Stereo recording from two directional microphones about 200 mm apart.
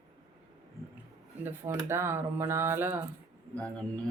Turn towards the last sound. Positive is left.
turn(degrees=5)  # may be behind; listen again after turning